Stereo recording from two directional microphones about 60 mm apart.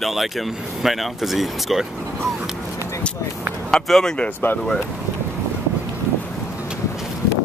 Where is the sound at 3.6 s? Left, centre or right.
Centre.